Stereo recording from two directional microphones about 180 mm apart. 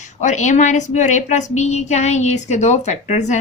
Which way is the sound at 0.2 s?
40° left (ahead or behind).